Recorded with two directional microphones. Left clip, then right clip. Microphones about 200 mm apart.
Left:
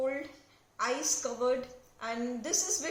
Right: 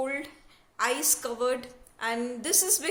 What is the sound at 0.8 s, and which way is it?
A woman's voice, 50° right (ahead or behind).